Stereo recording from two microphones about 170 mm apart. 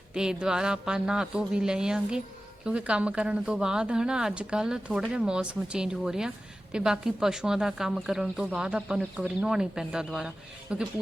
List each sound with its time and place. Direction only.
0.1 s speech: 5° right (ahead or behind)